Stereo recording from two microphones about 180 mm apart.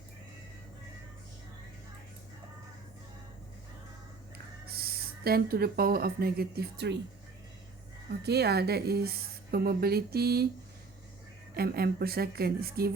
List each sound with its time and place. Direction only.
4.6 s speech: 60° right (ahead or behind)
8.2 s a woman's voice: 65° right (ahead or behind)
11.5 s a woman's voice: 60° right (ahead or behind)